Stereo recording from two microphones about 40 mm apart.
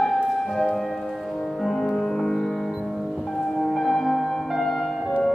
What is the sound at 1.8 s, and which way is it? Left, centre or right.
Music, centre.